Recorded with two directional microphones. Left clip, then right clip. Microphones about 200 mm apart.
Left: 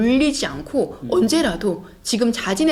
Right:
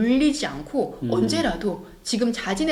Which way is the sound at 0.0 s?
40° left (ahead or behind).